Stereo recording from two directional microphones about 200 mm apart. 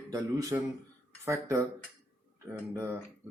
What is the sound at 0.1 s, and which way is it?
Speech, 15° right (ahead or behind).